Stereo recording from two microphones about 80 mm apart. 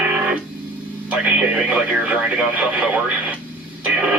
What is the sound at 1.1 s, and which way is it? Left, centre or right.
Radio, centre.